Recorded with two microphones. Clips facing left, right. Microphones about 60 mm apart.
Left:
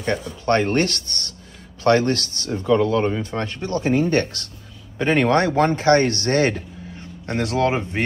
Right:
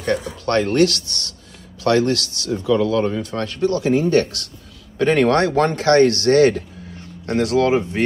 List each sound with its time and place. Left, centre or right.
0.5 s speech: left
4.9 s speech: left